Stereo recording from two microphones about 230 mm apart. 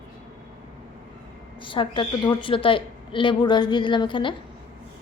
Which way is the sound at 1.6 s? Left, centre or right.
Left.